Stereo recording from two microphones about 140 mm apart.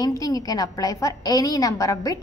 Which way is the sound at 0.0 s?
25° left (ahead or behind).